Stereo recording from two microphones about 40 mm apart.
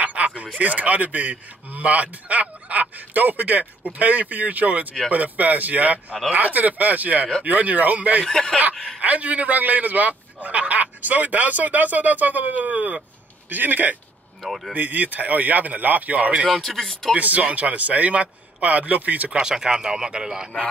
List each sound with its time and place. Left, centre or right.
0.0 s a sound: right
0.6 s a man's voice: right
8.3 s speech: centre
9.0 s a man's voice: right
13.5 s speech: right
14.4 s speech: centre
14.7 s speech: right
16.5 s speech: centre
17.2 s a man's voice: right
19.4 s speech: centre